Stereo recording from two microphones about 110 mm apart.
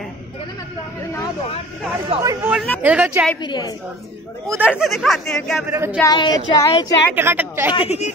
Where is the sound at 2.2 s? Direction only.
30° right (ahead or behind).